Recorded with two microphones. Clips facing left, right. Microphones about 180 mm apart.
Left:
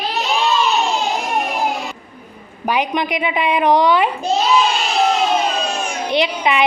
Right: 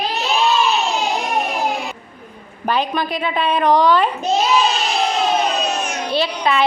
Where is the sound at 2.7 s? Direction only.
15° left (ahead or behind).